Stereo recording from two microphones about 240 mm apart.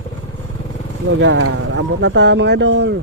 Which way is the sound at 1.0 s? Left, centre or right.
Right.